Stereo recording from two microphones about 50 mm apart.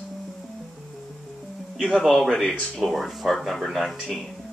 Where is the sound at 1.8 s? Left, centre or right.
Centre.